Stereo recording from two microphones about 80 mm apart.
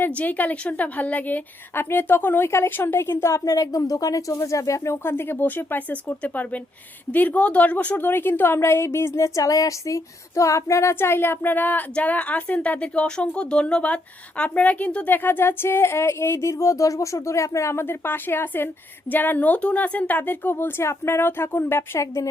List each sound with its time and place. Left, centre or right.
0.0 s a woman's voice: centre; by 22.3 s left